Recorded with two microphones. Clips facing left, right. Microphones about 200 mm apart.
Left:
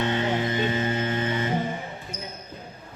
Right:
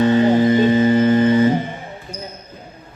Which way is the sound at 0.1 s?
40° right (ahead or behind).